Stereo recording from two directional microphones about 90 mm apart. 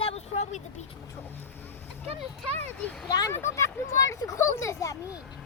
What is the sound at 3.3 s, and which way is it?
Speech, 30° left (ahead or behind).